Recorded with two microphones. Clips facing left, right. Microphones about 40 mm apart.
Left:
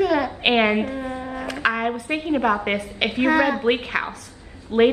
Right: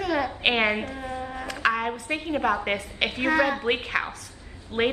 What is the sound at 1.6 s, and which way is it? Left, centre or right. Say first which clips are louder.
A woman's voice: left 2 dB; centre.